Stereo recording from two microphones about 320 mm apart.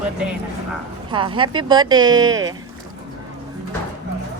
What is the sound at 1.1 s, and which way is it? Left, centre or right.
Speech, centre.